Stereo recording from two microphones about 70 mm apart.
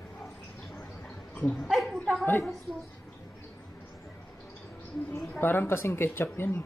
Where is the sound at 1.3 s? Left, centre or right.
Centre.